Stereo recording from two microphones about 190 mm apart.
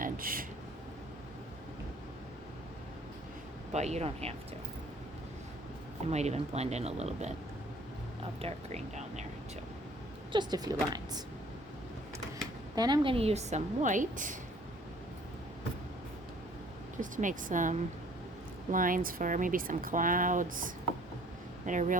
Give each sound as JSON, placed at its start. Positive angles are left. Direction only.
{"t": 0.0, "sound": "a sound", "side_deg": -50}
{"t": 3.7, "sound": "a woman's voice", "side_deg": -35}
{"t": 6.1, "sound": "a woman's voice", "side_deg": -35}
{"t": 10.3, "sound": "speech", "side_deg": -20}
{"t": 12.7, "sound": "a woman's voice", "side_deg": -20}
{"t": 17.0, "sound": "speech", "side_deg": -45}